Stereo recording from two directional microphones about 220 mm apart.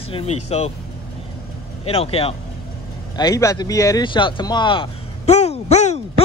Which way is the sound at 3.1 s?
15° left (ahead or behind).